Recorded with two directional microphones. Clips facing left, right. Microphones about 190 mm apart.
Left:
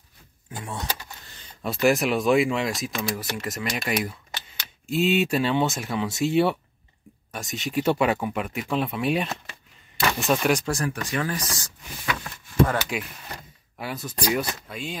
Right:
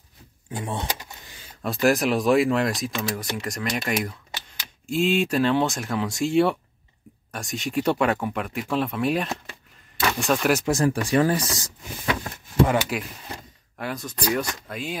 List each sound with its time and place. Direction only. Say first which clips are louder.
0.5 s speech: right 4 dB; 25° right (ahead or behind)
0.8 s power windows: right 1 dB; 15° right (ahead or behind)
1.6 s speech: even; centre (ahead or behind)
10.6 s speech: right 6 dB; 25° right (ahead or behind)
12.6 s speech: right 4 dB; 15° right (ahead or behind)
13.7 s speech: right 1 dB; 5° left (ahead or behind)